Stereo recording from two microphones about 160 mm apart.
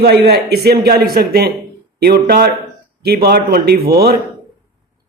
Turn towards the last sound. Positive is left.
turn(degrees=-75)  # may be behind; listen again after turning